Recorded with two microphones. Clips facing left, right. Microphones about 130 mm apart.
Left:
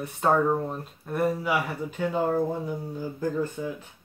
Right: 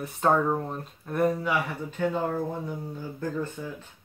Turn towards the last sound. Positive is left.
turn(degrees=10)  # may be behind; listen again after turning